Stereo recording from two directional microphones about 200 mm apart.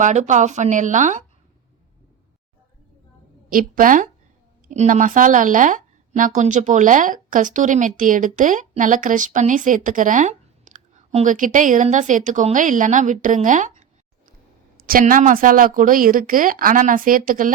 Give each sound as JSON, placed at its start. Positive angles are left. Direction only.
{"t": 0.0, "sound": "speech", "side_deg": -35}
{"t": 3.5, "sound": "a woman's voice", "side_deg": -45}